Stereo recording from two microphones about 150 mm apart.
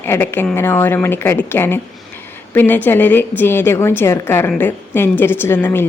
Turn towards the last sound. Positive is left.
turn(degrees=15)  # may be behind; listen again after turning